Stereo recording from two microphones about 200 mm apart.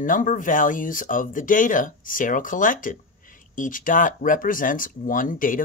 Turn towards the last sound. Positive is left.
turn(degrees=40)  # may be behind; listen again after turning